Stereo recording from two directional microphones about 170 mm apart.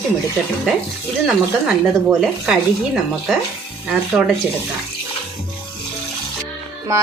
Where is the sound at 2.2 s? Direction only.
5° right (ahead or behind).